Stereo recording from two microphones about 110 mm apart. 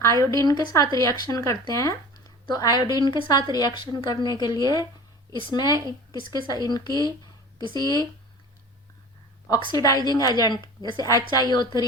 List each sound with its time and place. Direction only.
0.0 s speech: 30° left (ahead or behind)
9.6 s a woman's voice: 50° left (ahead or behind)
9.8 s speech: 35° left (ahead or behind)